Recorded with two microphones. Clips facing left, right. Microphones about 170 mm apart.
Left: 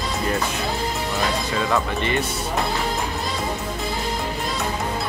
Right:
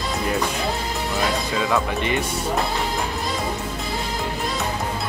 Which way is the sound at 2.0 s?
15° right (ahead or behind).